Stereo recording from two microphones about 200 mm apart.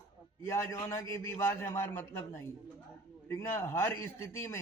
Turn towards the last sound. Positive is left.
turn(degrees=15)  # may be behind; listen again after turning